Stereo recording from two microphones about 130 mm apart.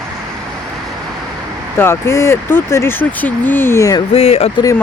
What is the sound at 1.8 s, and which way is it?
Speech, 20° left (ahead or behind).